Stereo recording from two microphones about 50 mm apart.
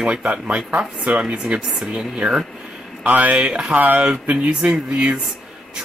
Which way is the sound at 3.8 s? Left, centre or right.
Right.